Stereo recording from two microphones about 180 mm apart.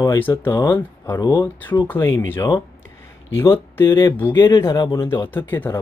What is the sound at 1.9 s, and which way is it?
Speech, 20° left (ahead or behind).